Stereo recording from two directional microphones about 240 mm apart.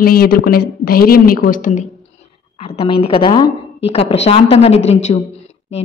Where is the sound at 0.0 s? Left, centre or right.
Left.